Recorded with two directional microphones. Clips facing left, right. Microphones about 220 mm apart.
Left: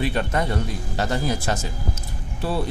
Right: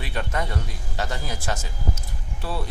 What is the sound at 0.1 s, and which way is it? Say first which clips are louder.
A man's voice: left 5 dB; 35° left (ahead or behind).